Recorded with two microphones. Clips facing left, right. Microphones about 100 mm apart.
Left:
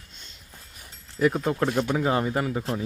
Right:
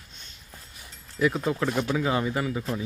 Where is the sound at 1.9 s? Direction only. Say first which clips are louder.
Left 2 dB; 40° left (ahead or behind).